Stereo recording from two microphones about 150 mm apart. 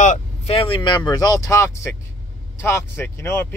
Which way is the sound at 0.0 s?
55° left (ahead or behind).